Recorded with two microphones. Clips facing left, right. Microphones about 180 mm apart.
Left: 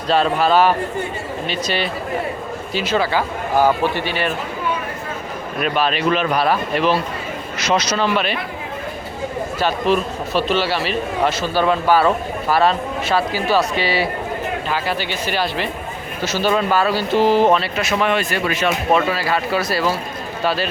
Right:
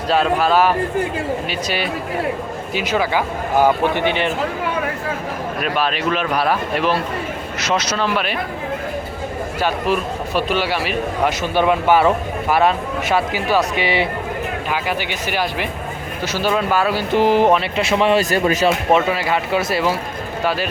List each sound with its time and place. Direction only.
0.1 s a man's voice: centre (ahead or behind); by 4.3 s 20° right (ahead or behind)
5.7 s a man's voice: centre (ahead or behind)
7.6 s a man's voice: centre (ahead or behind)
9.6 s speech: 10° right (ahead or behind)
17.7 s speech: 25° right (ahead or behind)
18.3 s speech: 40° right (ahead or behind)
18.9 s speech: 20° right (ahead or behind)